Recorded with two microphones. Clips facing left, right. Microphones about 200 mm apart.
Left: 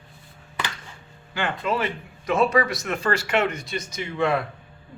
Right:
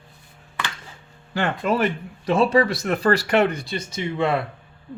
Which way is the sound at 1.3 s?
40° right (ahead or behind).